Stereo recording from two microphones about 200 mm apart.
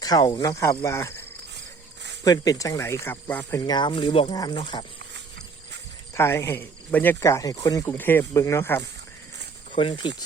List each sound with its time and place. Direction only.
0.0 s speech: 20° left (ahead or behind)
2.2 s speech: 20° left (ahead or behind)
3.7 s speech: 20° left (ahead or behind)
6.1 s speech: 15° left (ahead or behind)
9.7 s speech: 25° left (ahead or behind)